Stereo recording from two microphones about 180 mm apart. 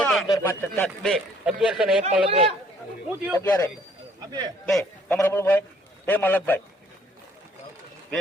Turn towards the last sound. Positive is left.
turn(degrees=10)  # may be behind; listen again after turning